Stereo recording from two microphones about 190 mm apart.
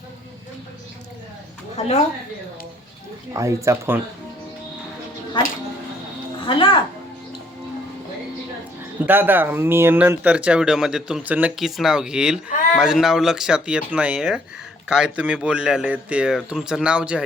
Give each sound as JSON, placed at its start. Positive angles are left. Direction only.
{"t": 1.8, "sound": "a woman's voice", "side_deg": 35}
{"t": 3.3, "sound": "speech", "side_deg": -15}
{"t": 6.4, "sound": "speech", "side_deg": 30}
{"t": 9.0, "sound": "speech", "side_deg": -10}